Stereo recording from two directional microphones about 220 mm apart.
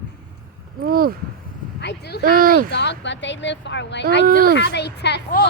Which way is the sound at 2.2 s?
40° right (ahead or behind).